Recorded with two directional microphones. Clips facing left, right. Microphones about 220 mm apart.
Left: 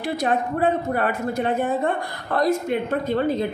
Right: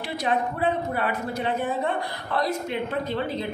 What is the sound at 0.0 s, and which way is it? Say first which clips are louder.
A woman's voice: left 3 dB; 45° left (ahead or behind).